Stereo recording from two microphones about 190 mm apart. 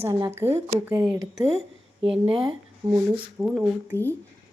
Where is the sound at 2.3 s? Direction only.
Centre (ahead or behind).